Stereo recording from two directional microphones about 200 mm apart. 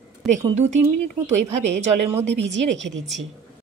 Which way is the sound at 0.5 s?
35° right (ahead or behind).